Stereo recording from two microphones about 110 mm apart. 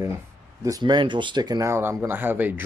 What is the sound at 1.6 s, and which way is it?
Speech, 25° right (ahead or behind).